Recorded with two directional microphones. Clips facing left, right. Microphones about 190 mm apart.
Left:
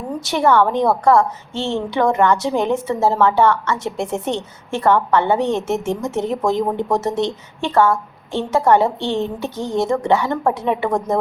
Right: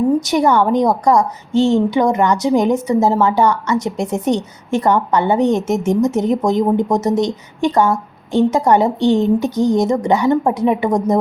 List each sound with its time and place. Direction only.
0.3 s a woman's voice: 15° right (ahead or behind)